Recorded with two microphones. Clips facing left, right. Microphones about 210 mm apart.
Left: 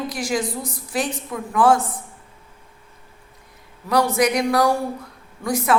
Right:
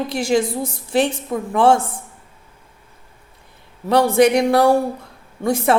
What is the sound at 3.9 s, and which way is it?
A woman's voice, 25° right (ahead or behind).